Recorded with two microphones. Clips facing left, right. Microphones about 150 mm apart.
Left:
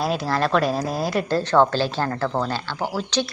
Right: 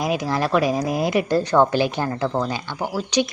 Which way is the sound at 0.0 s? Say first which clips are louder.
Even; 15° right (ahead or behind).